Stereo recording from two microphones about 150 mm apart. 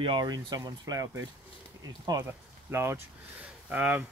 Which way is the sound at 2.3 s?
15° right (ahead or behind).